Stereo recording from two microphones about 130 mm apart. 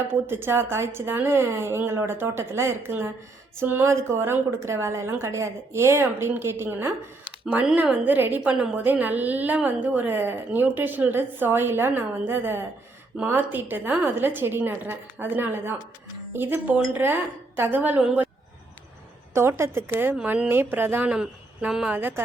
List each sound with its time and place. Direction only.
0.3 s a woman's voice: 15° right (ahead or behind)
7.4 s a woman's voice: 5° right (ahead or behind)
19.3 s a woman's voice: 20° right (ahead or behind)